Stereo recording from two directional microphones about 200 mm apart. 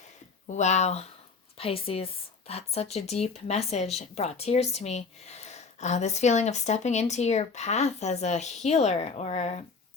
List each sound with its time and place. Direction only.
0.4 s a woman's voice: 35° left (ahead or behind)